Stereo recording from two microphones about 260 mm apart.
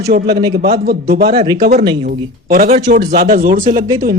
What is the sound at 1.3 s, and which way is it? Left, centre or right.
A man's voice, centre.